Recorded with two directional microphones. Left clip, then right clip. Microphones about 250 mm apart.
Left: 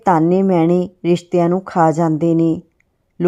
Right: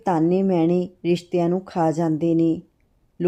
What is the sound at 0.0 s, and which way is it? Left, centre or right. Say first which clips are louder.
A woman's voice: left 6 dB; centre.